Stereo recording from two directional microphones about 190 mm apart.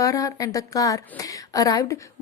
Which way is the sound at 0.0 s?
20° left (ahead or behind).